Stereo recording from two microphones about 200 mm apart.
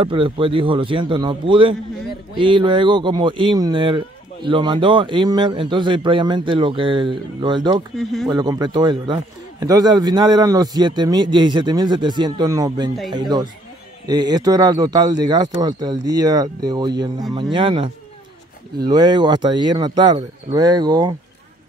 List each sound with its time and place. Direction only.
0.0 s speech: 25° right (ahead or behind)
7.9 s speech: centre (ahead or behind)
8.3 s speech: 20° right (ahead or behind)
14.0 s speech: 20° right (ahead or behind)